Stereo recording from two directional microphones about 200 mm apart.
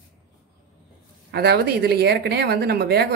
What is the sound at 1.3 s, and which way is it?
Speech, 55° right (ahead or behind).